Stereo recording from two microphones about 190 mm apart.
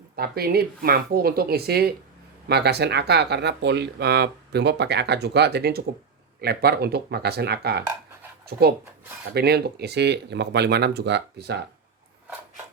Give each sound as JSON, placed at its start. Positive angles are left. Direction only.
{"t": 0.2, "sound": "speech", "side_deg": -55}